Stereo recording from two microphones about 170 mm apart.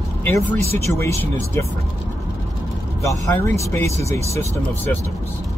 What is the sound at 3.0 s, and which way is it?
Speech, 20° left (ahead or behind).